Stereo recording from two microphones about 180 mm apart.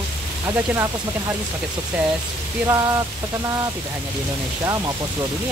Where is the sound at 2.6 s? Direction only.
20° right (ahead or behind).